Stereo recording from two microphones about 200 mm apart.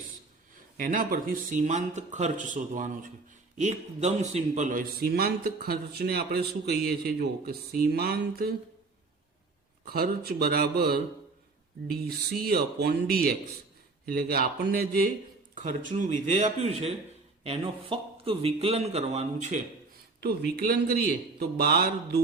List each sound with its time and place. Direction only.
0.8 s a man's voice: 45° right (ahead or behind)
9.8 s a man's voice: 50° right (ahead or behind)
12.4 s a man's voice: 50° right (ahead or behind); by 19.5 s 35° right (ahead or behind)
20.6 s a man's voice: 50° right (ahead or behind)